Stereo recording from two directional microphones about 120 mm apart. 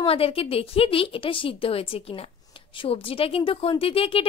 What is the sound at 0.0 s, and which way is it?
Speech, 50° left (ahead or behind).